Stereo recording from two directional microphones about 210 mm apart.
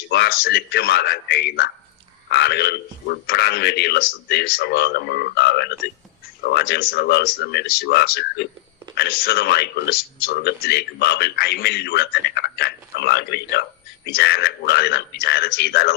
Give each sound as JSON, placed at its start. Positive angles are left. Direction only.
{"t": 0.1, "sound": "speech", "side_deg": 50}